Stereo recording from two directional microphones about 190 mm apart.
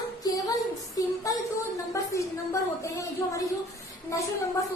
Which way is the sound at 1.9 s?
15° left (ahead or behind).